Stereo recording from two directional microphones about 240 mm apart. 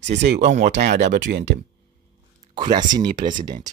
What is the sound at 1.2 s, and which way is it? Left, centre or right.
Speech, right.